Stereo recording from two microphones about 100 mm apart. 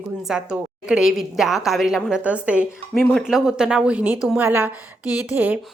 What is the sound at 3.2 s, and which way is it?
A woman's voice, 5° right (ahead or behind).